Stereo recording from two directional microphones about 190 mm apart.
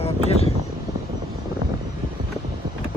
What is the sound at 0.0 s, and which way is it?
Vehicle, 30° left (ahead or behind).